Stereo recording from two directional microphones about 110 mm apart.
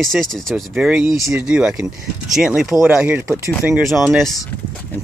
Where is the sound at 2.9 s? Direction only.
15° right (ahead or behind).